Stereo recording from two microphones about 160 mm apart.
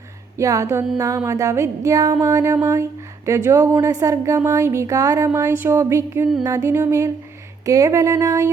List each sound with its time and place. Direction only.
0.3 s speech: 20° right (ahead or behind)
6.4 s music: 20° right (ahead or behind)
7.6 s speech: 20° right (ahead or behind)